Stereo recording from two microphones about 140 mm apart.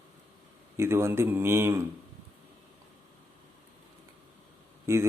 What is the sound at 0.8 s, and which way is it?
A man's voice, 20° right (ahead or behind).